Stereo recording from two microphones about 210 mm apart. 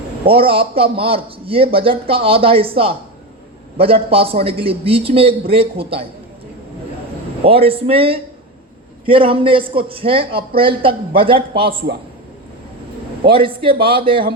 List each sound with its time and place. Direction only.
0.3 s a man's voice: 25° right (ahead or behind)
7.4 s a man's voice: 25° right (ahead or behind)
13.2 s a man's voice: 25° right (ahead or behind)